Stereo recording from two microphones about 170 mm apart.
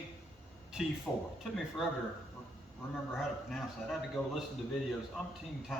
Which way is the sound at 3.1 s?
Centre (ahead or behind).